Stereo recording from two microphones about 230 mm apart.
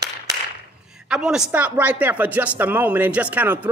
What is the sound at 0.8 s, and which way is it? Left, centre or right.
Speech, centre.